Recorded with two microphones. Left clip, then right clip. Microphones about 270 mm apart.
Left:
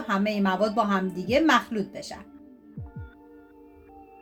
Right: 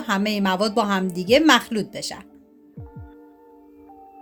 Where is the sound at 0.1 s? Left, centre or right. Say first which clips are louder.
Right 3 dB; right.